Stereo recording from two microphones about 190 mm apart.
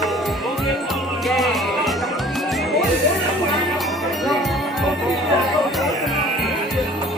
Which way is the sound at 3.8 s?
Centre (ahead or behind).